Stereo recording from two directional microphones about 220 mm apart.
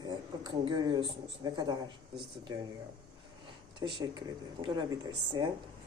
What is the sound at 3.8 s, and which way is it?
Speech, 20° right (ahead or behind).